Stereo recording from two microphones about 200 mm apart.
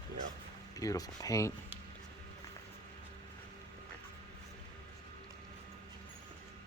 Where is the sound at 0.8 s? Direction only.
15° left (ahead or behind).